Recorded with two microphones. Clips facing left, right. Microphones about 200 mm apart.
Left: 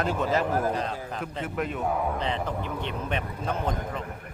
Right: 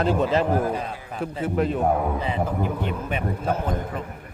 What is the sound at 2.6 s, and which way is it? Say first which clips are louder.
Speech: right 6 dB; 45° right (ahead or behind).